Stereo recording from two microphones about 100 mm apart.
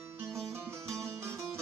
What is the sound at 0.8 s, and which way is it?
Music, 5° left (ahead or behind).